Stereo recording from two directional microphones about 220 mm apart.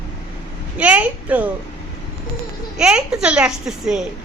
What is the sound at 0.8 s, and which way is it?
Speech, 5° right (ahead or behind).